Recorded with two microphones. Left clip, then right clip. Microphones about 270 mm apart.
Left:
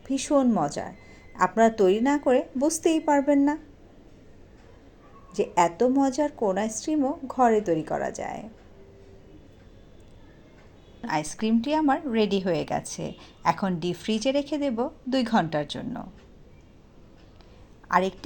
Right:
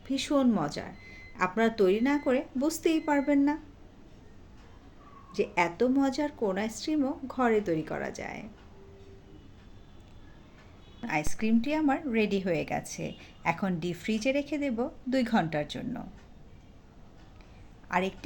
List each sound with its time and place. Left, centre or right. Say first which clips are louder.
0.1 s a woman's voice: left 4 dB; centre
5.3 s a woman's voice: left 5 dB; centre
11.0 s a woman's voice: left 3 dB; centre
17.8 s speech: left 7 dB; centre